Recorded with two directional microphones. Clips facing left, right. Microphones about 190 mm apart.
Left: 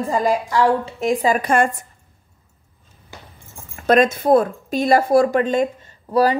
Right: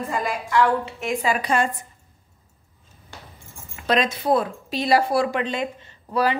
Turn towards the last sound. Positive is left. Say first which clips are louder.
# left 5 dB
turn(degrees=40)  # may be behind; listen again after turning